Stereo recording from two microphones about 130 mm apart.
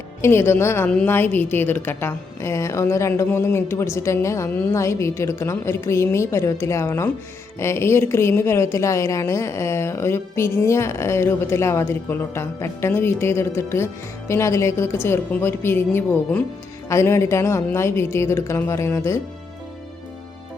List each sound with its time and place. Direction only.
0.2 s a woman's voice: 20° left (ahead or behind)